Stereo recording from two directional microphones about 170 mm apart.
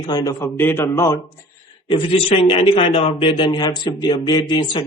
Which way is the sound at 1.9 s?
35° left (ahead or behind).